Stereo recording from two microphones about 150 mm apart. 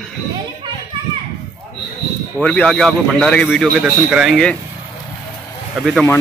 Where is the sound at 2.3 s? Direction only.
5° left (ahead or behind).